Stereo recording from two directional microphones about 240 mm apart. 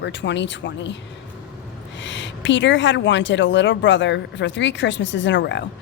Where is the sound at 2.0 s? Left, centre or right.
Left.